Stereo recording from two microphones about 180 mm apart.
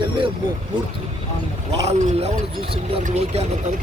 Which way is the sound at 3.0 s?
45° right (ahead or behind).